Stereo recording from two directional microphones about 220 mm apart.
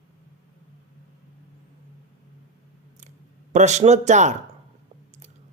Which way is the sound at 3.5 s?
30° right (ahead or behind).